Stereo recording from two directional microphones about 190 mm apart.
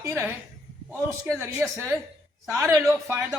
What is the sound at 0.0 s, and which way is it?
Speech, 10° right (ahead or behind).